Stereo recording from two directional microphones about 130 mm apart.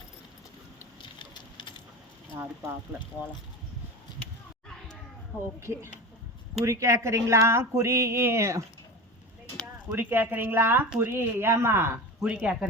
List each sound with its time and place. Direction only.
1.2 s patter: 35° left (ahead or behind)
2.3 s speech: 15° right (ahead or behind)
5.5 s a sound: 20° right (ahead or behind)
9.9 s speech: 15° right (ahead or behind)